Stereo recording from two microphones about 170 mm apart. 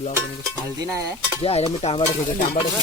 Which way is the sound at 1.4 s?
35° left (ahead or behind).